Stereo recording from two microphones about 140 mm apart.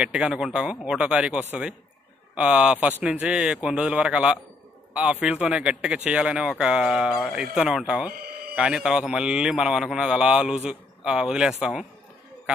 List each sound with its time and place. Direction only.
0.0 s a man's voice: 5° right (ahead or behind)